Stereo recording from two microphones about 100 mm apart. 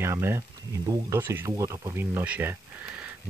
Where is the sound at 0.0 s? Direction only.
25° right (ahead or behind).